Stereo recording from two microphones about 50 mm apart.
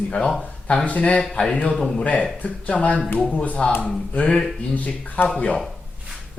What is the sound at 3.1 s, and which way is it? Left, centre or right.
Speech, left.